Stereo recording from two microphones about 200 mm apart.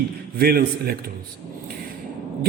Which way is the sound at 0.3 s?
50° right (ahead or behind).